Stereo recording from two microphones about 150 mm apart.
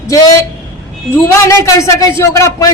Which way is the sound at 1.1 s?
20° left (ahead or behind).